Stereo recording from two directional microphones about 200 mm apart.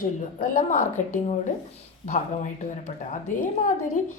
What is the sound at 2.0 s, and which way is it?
Speech, 35° left (ahead or behind).